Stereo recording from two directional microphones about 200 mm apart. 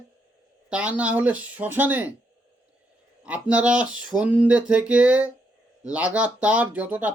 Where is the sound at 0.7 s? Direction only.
5° right (ahead or behind).